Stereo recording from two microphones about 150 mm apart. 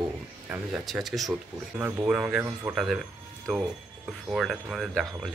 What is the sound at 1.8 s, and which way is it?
Speech, 15° right (ahead or behind).